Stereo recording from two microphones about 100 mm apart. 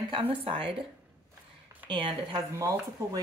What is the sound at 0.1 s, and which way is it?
Speech, 60° right (ahead or behind).